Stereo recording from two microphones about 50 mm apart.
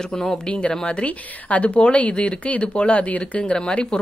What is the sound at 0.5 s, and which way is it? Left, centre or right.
Speech, left.